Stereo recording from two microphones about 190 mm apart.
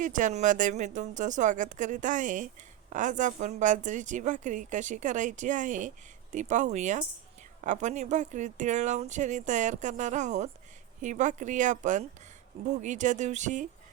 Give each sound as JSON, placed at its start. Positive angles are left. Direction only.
{"t": 0.0, "sound": "a woman's voice", "side_deg": -40}